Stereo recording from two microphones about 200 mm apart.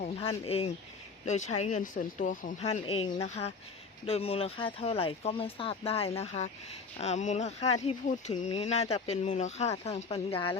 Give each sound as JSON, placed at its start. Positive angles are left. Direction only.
{"t": 0.0, "sound": "speech", "side_deg": 30}